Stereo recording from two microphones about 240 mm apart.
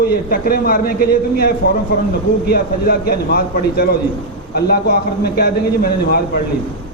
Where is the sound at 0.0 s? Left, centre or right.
Left.